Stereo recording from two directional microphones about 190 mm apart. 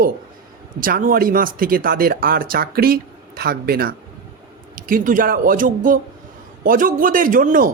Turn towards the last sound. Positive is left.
turn(degrees=-45)  # may be behind; listen again after turning